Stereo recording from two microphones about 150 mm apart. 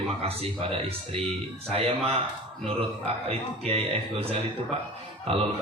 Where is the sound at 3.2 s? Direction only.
40° right (ahead or behind).